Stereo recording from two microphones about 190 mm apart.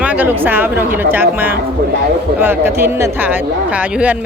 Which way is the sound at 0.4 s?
10° right (ahead or behind).